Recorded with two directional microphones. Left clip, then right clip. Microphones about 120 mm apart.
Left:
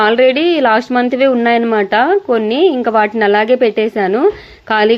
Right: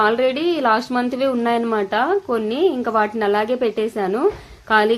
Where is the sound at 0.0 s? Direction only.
40° left (ahead or behind).